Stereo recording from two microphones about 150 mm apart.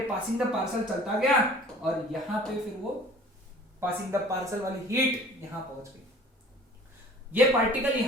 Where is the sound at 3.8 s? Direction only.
15° right (ahead or behind).